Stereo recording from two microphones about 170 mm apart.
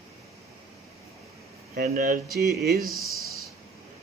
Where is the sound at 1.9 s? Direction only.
65° right (ahead or behind).